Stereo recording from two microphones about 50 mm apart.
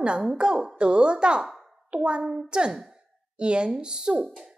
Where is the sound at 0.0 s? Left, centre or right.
Centre.